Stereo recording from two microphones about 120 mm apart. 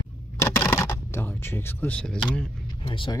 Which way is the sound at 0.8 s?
20° left (ahead or behind).